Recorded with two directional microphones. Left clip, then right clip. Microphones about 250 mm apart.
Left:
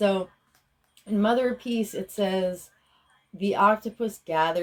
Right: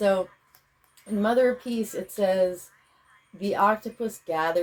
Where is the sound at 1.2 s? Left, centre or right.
Left.